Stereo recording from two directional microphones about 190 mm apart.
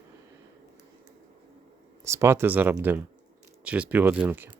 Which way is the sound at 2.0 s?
15° right (ahead or behind).